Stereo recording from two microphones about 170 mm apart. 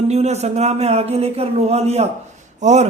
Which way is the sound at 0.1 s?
40° right (ahead or behind).